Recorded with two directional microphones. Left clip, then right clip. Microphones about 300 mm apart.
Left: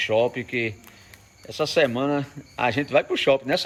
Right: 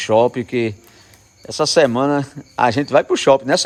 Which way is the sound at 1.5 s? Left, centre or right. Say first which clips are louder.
Right 7 dB; centre.